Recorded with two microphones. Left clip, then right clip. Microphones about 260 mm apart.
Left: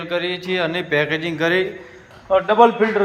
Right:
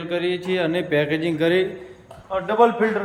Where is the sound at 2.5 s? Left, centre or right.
Left.